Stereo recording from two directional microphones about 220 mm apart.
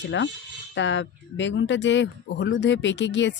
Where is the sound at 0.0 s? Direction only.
55° left (ahead or behind).